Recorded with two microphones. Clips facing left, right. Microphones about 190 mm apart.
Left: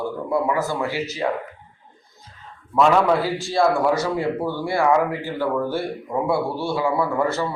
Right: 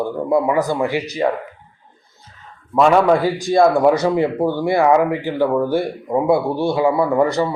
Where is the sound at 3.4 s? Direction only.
15° right (ahead or behind).